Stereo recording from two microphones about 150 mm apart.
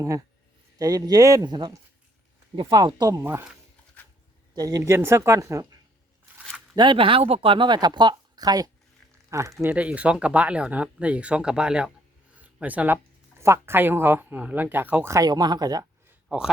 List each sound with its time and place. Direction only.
0.8 s speech: 25° right (ahead or behind)
4.5 s speech: 25° right (ahead or behind)
6.7 s speech: 35° right (ahead or behind); by 11.9 s 5° right (ahead or behind)
12.4 s a sound: 10° right (ahead or behind)
13.4 s speech: 15° right (ahead or behind)
16.0 s a sound: 5° right (ahead or behind)